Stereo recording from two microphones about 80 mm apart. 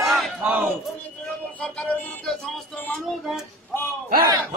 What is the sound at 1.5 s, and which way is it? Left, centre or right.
Music, centre.